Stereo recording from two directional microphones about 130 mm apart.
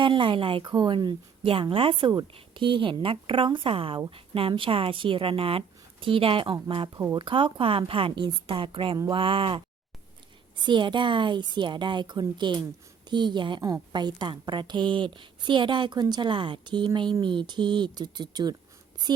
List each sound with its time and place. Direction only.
0.0 s a woman's voice: 40° right (ahead or behind)
10.6 s a woman's voice: 35° right (ahead or behind)